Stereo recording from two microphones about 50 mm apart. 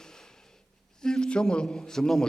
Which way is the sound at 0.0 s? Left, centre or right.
Centre.